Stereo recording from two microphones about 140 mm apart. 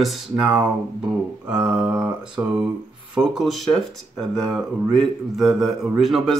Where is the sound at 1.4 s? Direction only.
5° right (ahead or behind).